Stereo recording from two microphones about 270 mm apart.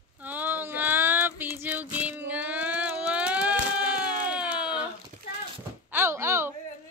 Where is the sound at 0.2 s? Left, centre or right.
Centre.